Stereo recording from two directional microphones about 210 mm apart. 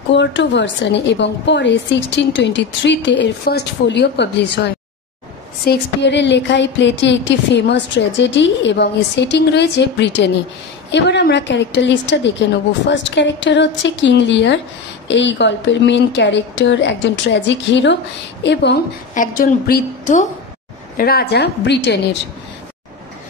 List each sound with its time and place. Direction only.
0.2 s speech: 60° left (ahead or behind)
5.7 s speech: 55° left (ahead or behind)
19.1 s a woman's voice: 40° left (ahead or behind)